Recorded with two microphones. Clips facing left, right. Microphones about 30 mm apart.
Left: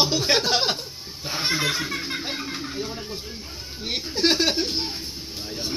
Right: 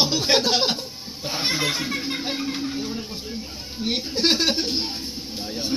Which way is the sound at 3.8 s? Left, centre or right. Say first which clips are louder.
Right 1 dB; right.